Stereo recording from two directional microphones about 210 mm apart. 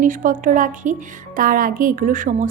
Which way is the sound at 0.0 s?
40° right (ahead or behind).